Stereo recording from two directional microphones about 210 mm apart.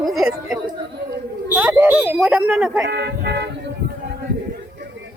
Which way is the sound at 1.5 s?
10° right (ahead or behind).